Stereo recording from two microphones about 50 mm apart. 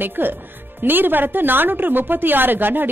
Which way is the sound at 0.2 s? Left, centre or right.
Right.